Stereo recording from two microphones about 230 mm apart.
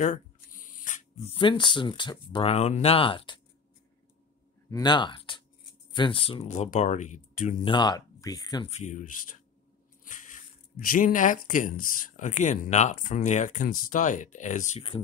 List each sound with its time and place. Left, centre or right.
0.8 s speech: left
4.6 s speech: centre; by 7.7 s left
7.7 s speech: centre